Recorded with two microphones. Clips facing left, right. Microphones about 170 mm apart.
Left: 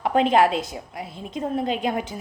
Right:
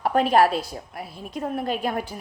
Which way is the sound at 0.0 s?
20° left (ahead or behind).